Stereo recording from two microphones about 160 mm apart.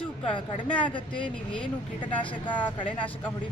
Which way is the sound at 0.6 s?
10° left (ahead or behind).